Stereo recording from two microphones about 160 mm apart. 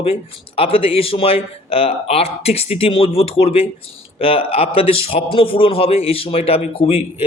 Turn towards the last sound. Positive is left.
turn(degrees=35)  # may be behind; listen again after turning